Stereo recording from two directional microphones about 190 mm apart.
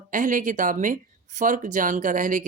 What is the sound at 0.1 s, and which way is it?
Speech, 45° right (ahead or behind).